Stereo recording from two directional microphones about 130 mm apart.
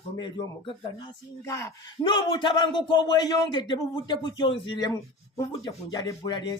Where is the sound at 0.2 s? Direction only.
35° left (ahead or behind).